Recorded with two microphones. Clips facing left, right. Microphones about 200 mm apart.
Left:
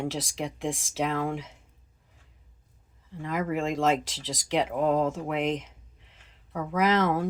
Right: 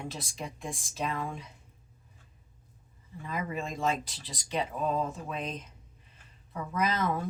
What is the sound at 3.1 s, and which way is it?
Speech, 90° left.